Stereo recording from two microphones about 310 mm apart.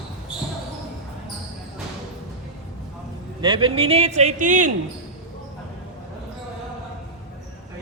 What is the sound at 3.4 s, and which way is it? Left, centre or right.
A man's voice, centre.